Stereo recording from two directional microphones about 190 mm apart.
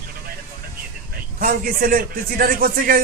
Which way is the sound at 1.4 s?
45° right (ahead or behind).